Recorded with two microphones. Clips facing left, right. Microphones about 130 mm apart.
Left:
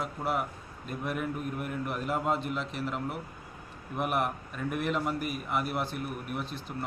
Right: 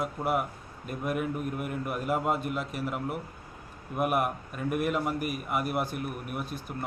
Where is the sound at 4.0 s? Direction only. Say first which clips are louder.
Right 3 dB; 10° right (ahead or behind).